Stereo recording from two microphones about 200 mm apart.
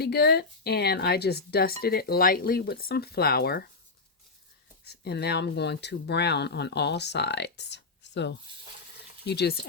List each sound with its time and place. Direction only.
0.0 s speech: 55° left (ahead or behind)
4.9 s speech: 55° left (ahead or behind)